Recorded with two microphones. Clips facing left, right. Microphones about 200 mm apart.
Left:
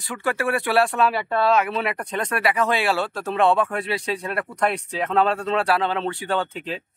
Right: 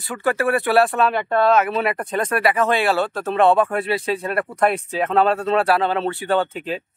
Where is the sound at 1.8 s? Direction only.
50° right (ahead or behind).